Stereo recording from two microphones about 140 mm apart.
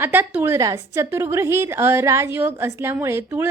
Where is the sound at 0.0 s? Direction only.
15° right (ahead or behind).